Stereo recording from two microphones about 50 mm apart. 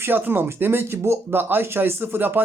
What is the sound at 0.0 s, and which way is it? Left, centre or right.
Speech, right.